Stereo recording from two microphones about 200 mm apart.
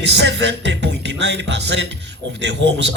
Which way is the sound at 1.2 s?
60° right (ahead or behind).